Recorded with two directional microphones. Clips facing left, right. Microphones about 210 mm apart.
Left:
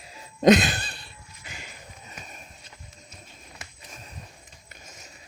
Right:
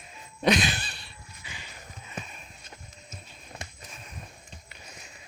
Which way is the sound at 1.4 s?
45° left (ahead or behind).